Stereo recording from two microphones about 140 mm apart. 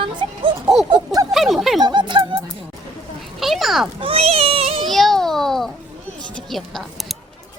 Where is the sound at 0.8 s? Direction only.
30° right (ahead or behind).